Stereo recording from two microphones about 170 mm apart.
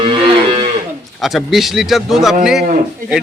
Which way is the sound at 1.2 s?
Centre (ahead or behind).